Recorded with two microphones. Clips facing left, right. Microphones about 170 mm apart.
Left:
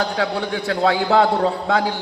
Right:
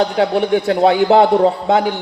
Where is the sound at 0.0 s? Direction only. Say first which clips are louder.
Right 7 dB; 20° right (ahead or behind).